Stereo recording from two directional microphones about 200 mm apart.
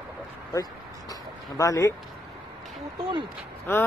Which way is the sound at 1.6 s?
15° left (ahead or behind).